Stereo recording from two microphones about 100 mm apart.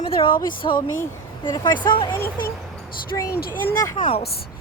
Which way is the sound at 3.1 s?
40° left (ahead or behind).